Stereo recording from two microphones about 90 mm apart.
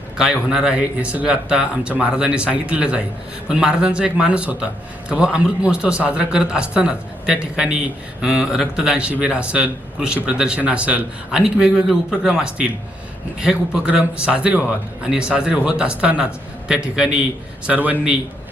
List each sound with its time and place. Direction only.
0.2 s a man's voice: 5° right (ahead or behind)